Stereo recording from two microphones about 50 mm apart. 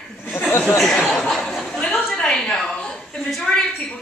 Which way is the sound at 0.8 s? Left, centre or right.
Centre.